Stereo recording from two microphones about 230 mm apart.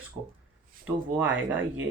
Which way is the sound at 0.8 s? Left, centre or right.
Centre.